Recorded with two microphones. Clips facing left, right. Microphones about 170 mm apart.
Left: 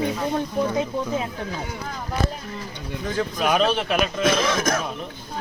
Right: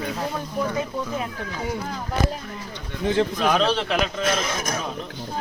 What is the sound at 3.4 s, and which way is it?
Speech, 5° left (ahead or behind).